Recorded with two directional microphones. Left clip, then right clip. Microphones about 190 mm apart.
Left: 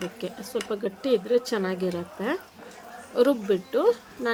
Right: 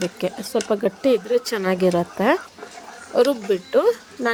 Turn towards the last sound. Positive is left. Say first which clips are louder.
# right 3 dB
turn(degrees=-40)  # may be behind; listen again after turning